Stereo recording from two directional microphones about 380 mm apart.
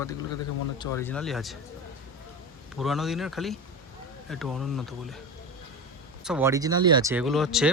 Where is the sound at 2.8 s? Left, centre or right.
Centre.